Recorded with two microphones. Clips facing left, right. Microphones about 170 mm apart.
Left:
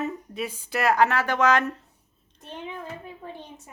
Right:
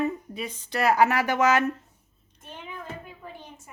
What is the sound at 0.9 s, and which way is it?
Speech, 10° right (ahead or behind).